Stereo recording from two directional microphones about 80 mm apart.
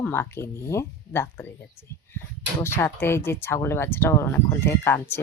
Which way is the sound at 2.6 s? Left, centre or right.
Left.